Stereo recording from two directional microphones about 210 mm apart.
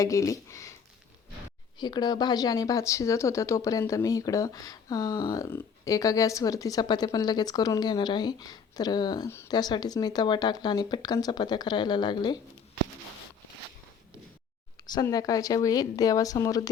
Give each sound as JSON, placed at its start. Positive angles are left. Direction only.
{"t": 0.0, "sound": "speech", "side_deg": 15}
{"t": 1.8, "sound": "speech", "side_deg": 20}
{"t": 14.8, "sound": "speech", "side_deg": 20}